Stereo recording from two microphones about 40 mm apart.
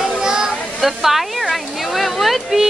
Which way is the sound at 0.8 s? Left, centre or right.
Centre.